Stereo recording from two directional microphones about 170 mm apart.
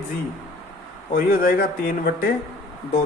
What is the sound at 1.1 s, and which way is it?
Speech, 55° left (ahead or behind).